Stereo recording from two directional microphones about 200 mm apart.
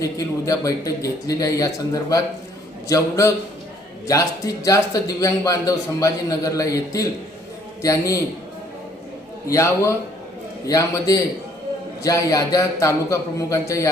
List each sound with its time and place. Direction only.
0.0 s speech: 15° left (ahead or behind)
9.5 s speech: 15° left (ahead or behind)